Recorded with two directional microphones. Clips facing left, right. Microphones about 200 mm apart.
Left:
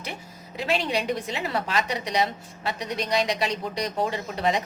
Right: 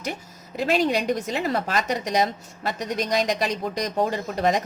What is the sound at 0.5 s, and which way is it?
A woman's voice, 45° right (ahead or behind).